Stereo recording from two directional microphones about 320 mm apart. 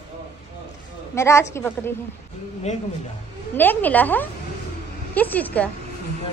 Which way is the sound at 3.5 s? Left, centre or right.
Centre.